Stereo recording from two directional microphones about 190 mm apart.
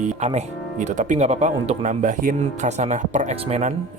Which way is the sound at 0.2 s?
35° right (ahead or behind).